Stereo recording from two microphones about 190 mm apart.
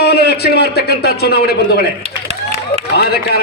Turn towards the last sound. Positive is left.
turn(degrees=55)  # may be behind; listen again after turning